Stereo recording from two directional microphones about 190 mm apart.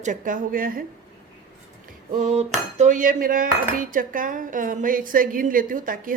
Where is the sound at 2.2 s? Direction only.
35° right (ahead or behind).